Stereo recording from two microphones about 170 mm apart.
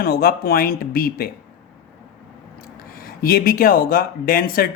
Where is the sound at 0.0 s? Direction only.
60° left (ahead or behind).